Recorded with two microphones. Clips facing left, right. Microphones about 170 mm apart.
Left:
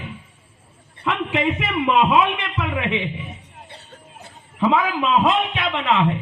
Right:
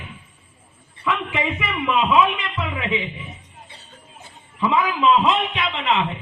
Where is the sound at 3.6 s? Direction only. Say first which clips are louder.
Left 4 dB; 60° left (ahead or behind).